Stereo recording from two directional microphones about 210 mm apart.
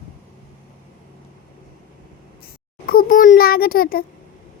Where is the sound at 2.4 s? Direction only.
45° left (ahead or behind).